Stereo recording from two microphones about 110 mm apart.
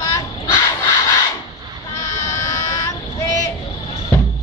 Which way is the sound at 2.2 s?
30° left (ahead or behind).